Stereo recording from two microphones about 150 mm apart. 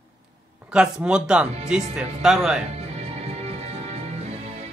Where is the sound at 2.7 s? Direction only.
45° right (ahead or behind).